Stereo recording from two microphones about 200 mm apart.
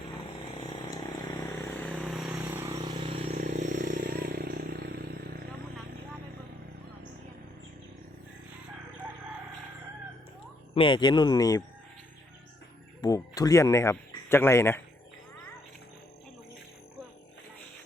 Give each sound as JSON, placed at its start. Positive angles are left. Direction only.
{"t": 1.6, "sound": "vehicle", "side_deg": 5}
{"t": 2.7, "sound": "vehicle", "side_deg": -25}
{"t": 3.4, "sound": "vehicle", "side_deg": -40}
{"t": 10.8, "sound": "speech", "side_deg": 25}
{"t": 13.0, "sound": "speech", "side_deg": 15}